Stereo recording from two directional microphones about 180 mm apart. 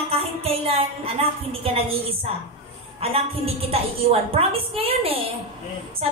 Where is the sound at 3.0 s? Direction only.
35° right (ahead or behind).